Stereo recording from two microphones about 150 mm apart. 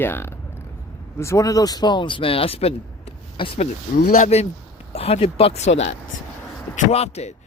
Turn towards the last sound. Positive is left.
turn(degrees=45)  # may be behind; listen again after turning